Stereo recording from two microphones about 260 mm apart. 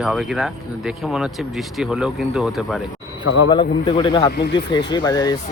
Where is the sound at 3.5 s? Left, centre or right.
Centre.